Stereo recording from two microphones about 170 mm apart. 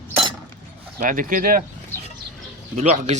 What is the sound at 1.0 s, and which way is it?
Speech, 50° right (ahead or behind).